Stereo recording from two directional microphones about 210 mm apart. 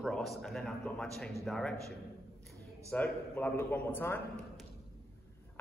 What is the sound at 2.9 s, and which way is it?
A man's voice, 10° left (ahead or behind).